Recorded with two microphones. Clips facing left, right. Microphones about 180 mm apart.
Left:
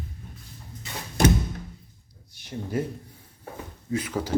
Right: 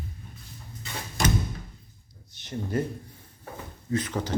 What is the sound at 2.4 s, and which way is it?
Speech, 10° left (ahead or behind).